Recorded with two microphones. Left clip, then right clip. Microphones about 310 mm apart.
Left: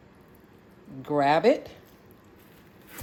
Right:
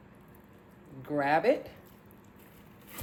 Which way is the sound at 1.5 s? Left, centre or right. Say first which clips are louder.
Left 5 dB; centre.